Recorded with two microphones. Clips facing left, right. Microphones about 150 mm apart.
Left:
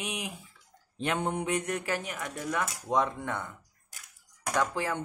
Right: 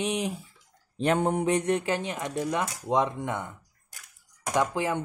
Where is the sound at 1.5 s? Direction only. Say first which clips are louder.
Right 5 dB; 25° right (ahead or behind).